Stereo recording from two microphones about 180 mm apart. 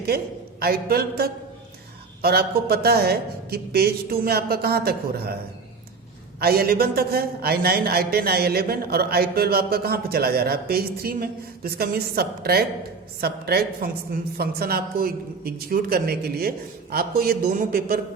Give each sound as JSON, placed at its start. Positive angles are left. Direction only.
{"t": 0.1, "sound": "a man's voice", "side_deg": -60}
{"t": 6.4, "sound": "a man's voice", "side_deg": -60}